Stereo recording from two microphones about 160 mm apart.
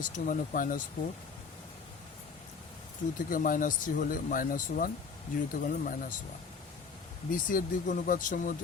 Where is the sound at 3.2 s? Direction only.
60° left (ahead or behind).